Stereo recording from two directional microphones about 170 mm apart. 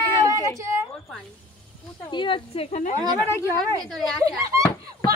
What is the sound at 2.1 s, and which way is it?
Speech, 30° left (ahead or behind).